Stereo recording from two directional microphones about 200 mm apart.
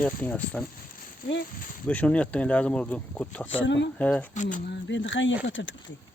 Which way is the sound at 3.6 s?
65° left (ahead or behind).